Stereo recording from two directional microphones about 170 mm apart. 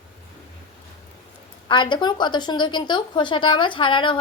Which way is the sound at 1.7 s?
30° left (ahead or behind).